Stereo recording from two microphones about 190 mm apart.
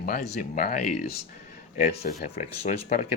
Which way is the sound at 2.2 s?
35° left (ahead or behind).